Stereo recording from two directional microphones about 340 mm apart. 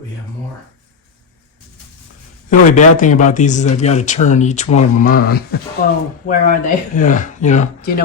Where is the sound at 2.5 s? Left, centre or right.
Left.